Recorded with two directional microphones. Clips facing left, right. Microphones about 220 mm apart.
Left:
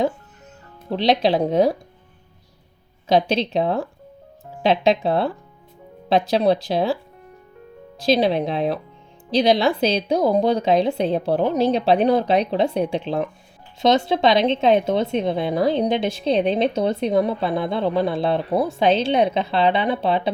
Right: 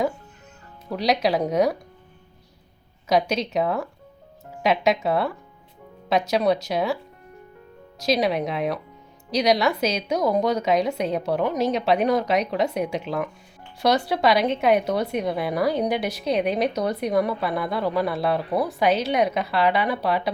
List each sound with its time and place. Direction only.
0.9 s a woman's voice: 30° left (ahead or behind)
3.1 s a woman's voice: 30° left (ahead or behind)